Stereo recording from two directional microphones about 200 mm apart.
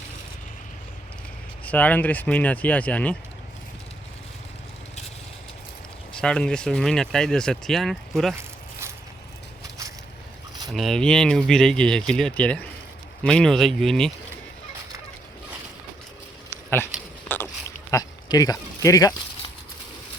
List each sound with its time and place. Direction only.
1.6 s speech: 5° left (ahead or behind)
6.1 s speech: 5° left (ahead or behind)
10.7 s speech: centre (ahead or behind)
16.5 s a sound: 10° left (ahead or behind)
17.9 s speech: 20° left (ahead or behind)